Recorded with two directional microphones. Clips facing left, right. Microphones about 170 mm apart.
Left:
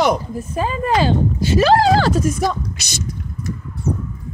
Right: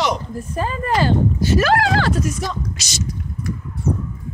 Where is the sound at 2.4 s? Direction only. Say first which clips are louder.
Left 5 dB; 55° left (ahead or behind).